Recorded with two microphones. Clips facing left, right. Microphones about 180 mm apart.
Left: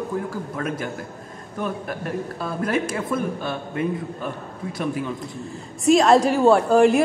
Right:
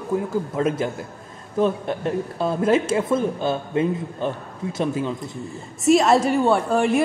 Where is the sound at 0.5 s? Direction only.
25° right (ahead or behind).